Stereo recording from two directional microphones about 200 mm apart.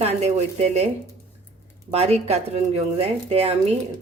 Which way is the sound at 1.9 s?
30° right (ahead or behind).